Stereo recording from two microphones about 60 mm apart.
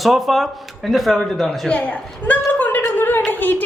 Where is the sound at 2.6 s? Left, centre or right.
Left.